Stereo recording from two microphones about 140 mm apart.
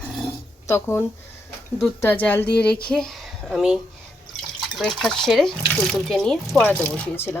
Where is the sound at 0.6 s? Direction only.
20° left (ahead or behind).